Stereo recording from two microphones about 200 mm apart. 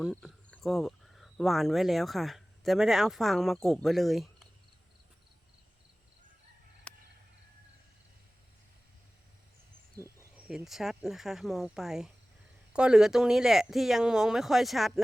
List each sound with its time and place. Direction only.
0.0 s speech: centre (ahead or behind)
6.9 s a sound: 5° left (ahead or behind)
10.0 s speech: 5° right (ahead or behind)